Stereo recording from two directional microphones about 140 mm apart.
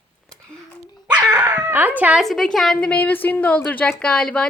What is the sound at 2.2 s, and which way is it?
A woman's voice, centre (ahead or behind).